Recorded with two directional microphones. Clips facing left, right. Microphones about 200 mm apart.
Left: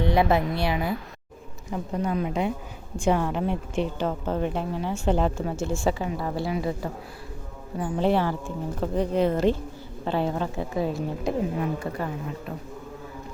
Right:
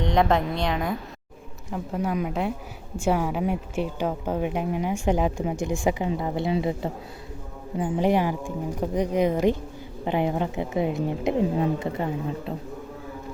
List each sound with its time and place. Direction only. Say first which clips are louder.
0.0 s a woman's voice: even; 5° left (ahead or behind); by 12.5 s 20° right (ahead or behind)